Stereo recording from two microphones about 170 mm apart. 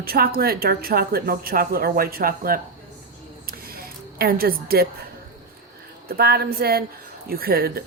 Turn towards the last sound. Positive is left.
turn(degrees=-65)  # may be behind; listen again after turning